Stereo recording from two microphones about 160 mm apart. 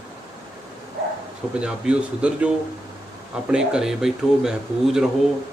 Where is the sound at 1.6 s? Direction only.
5° right (ahead or behind).